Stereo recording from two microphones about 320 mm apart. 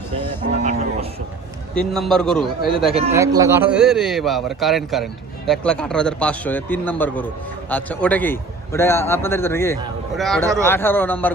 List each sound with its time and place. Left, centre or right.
0.6 s speech: centre
1.7 s a man's voice: centre